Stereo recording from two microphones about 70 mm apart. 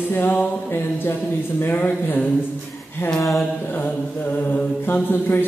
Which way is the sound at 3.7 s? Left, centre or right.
Left.